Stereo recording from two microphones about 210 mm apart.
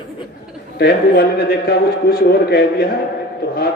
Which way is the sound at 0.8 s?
50° left (ahead or behind).